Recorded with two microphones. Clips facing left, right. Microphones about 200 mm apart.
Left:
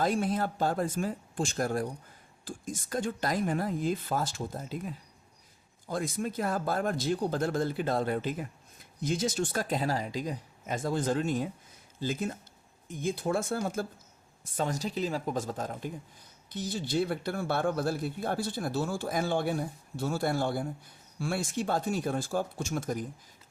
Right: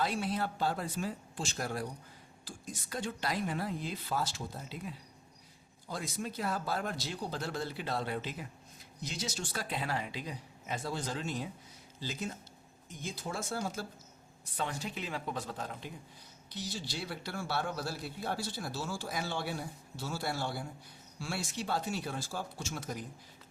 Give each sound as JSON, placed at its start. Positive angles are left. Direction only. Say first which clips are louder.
{"t": 0.0, "sound": "a man's voice", "louder": "left 5 dB", "side_deg": 45}